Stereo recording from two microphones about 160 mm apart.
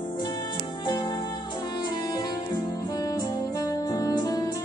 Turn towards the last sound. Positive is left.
turn(degrees=20)  # may be behind; listen again after turning